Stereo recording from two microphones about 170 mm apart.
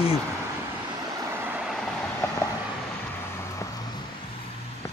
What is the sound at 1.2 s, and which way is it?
Vehicle, 15° right (ahead or behind).